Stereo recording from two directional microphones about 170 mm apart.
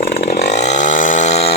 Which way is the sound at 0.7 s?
45° left (ahead or behind).